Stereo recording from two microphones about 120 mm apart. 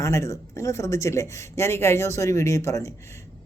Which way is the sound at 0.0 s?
25° left (ahead or behind).